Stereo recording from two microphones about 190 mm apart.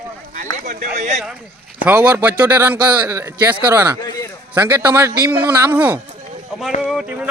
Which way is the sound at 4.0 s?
20° left (ahead or behind).